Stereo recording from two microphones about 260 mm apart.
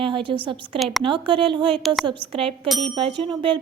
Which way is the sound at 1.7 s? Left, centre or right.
Centre.